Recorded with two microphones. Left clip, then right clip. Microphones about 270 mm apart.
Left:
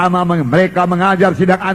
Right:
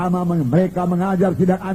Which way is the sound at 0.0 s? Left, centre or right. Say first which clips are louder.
Left 8 dB; left.